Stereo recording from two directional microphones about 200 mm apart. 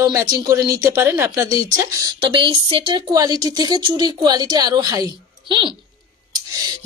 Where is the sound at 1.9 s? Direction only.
20° right (ahead or behind).